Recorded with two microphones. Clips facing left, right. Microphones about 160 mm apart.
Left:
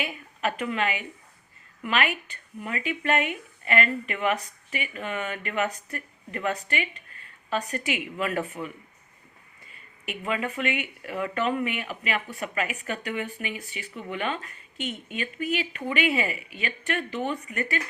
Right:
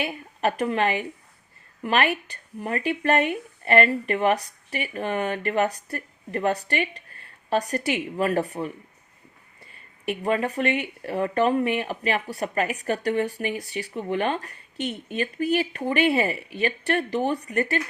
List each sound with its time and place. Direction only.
0.0 s speech: 35° right (ahead or behind)
10.1 s speech: 40° right (ahead or behind)